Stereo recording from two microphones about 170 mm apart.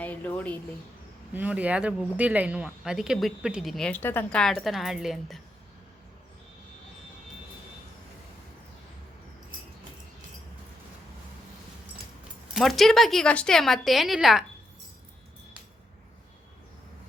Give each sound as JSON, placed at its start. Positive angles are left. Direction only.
{"t": 0.0, "sound": "a woman's voice", "side_deg": 10}
{"t": 1.3, "sound": "speech", "side_deg": -10}
{"t": 12.5, "sound": "speech", "side_deg": 0}